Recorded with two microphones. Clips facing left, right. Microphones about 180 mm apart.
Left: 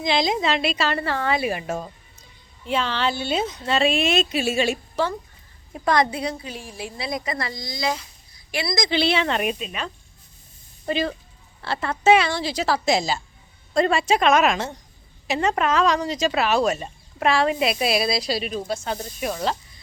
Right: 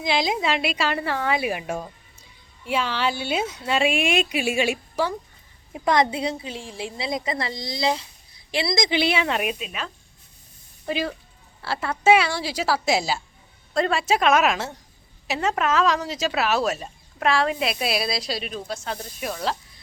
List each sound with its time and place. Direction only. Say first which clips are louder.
0.0 s a woman's voice: left 2 dB; 10° right (ahead or behind)